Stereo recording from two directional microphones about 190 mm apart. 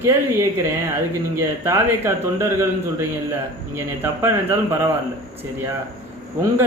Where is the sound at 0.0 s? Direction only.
15° right (ahead or behind).